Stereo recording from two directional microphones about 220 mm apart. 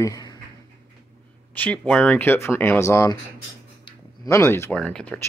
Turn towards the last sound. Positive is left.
turn(degrees=5)  # may be behind; listen again after turning